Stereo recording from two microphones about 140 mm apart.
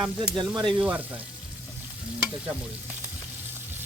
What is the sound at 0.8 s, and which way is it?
Speech, 10° right (ahead or behind).